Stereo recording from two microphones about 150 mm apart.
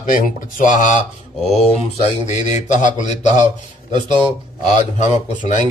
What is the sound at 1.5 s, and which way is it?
Speech, 45° left (ahead or behind).